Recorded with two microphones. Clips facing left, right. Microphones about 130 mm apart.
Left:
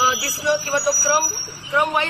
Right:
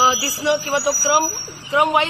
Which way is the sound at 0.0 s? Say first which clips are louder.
Right 3 dB; 20° right (ahead or behind).